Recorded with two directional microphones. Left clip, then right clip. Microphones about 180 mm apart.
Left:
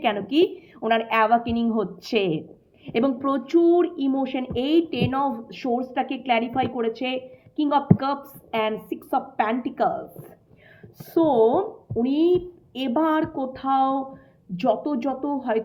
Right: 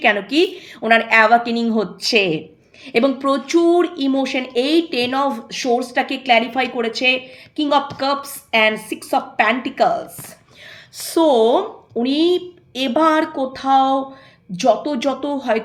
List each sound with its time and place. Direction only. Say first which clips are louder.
0.0 s a woman's voice: right 5 dB; 30° right (ahead or behind)